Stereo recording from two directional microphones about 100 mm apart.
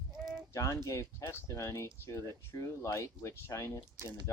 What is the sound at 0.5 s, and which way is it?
Speech, 30° left (ahead or behind).